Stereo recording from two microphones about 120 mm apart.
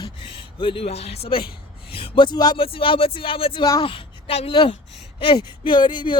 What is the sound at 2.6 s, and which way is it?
A woman's voice, 50° left (ahead or behind).